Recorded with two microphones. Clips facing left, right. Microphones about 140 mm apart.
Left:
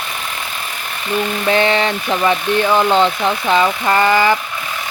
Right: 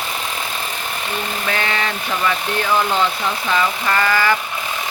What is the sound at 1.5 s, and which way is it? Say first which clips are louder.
Speech: left 8 dB; 25° left (ahead or behind).